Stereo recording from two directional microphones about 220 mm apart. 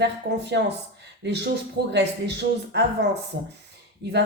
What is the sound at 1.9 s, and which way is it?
Speech, 50° right (ahead or behind).